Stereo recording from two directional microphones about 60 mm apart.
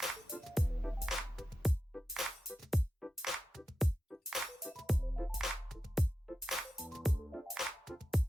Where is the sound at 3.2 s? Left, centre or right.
Centre.